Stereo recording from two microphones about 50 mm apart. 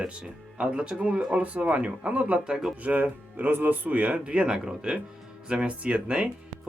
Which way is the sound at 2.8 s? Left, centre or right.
Right.